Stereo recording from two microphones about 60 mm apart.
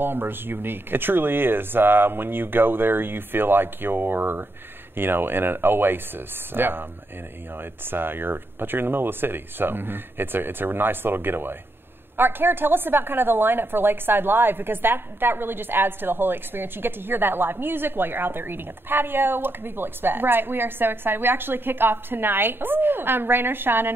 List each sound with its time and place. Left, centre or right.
0.0 s a woman's voice: right